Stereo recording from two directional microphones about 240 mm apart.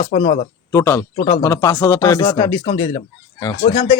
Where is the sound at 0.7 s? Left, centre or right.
Centre.